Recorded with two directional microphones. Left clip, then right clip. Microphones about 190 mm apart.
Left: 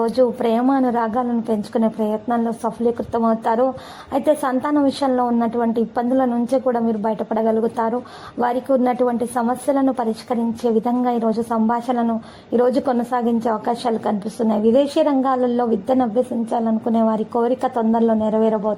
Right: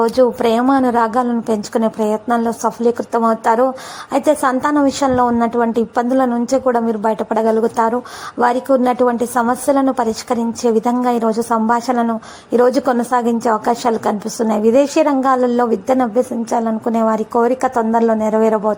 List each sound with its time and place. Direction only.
0.0 s a woman's voice: 20° right (ahead or behind)